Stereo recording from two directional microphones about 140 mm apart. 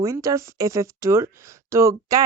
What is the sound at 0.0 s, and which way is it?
Speech, 25° right (ahead or behind).